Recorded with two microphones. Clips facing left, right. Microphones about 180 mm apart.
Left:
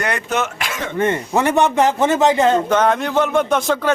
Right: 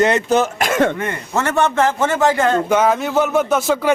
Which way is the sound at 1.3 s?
15° left (ahead or behind).